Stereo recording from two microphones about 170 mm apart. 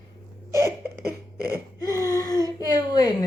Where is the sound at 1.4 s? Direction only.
20° left (ahead or behind).